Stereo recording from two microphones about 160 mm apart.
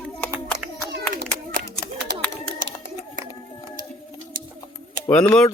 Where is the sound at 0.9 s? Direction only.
90° right.